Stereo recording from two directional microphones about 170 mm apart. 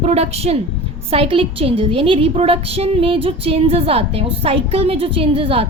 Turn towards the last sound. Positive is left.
turn(degrees=-35)  # may be behind; listen again after turning